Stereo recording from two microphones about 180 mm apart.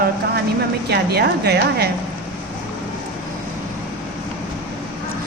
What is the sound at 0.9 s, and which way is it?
A woman's voice, 65° right (ahead or behind).